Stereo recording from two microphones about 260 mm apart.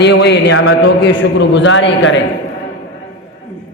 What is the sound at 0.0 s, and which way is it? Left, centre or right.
A man's voice, left.